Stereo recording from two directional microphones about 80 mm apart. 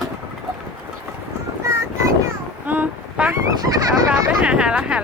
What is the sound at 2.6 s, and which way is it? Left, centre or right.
Child singing, centre.